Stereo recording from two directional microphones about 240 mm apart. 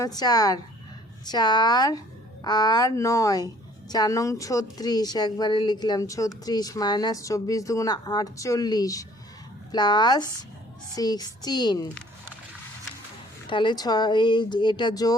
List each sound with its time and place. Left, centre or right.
0.0 s a woman's voice: centre
13.5 s speech: centre